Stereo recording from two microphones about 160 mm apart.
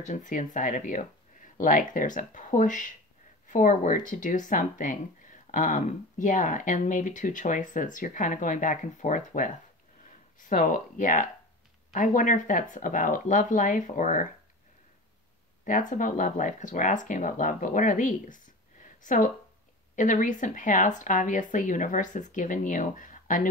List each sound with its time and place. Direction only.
0.0 s speech: 50° left (ahead or behind)
15.6 s speech: 50° left (ahead or behind)